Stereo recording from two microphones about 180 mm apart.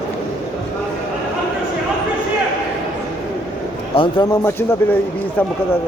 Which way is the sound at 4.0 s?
25° left (ahead or behind).